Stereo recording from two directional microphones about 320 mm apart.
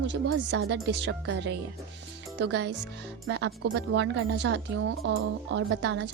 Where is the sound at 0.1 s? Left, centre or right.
Right.